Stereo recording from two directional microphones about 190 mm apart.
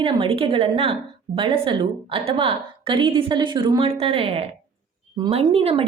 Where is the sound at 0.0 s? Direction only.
30° right (ahead or behind).